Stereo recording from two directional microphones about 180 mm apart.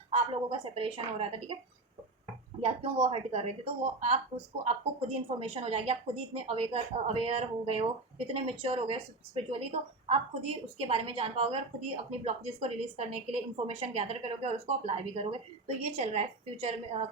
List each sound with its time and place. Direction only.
0.1 s speech: 30° right (ahead or behind)
2.6 s speech: 30° right (ahead or behind)